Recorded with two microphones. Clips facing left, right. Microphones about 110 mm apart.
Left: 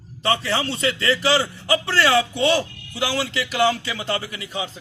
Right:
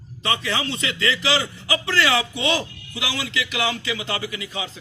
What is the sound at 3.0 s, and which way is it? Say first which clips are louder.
A man's voice: left 4 dB; 45° left (ahead or behind).